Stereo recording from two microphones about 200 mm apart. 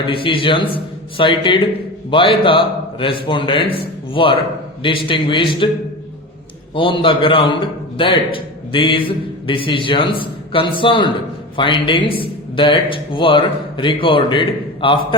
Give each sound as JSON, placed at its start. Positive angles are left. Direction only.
{"t": 0.1, "sound": "a man's voice", "side_deg": 25}
{"t": 6.7, "sound": "a man's voice", "side_deg": 25}